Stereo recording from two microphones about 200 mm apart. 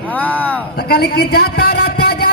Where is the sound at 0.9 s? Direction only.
55° left (ahead or behind).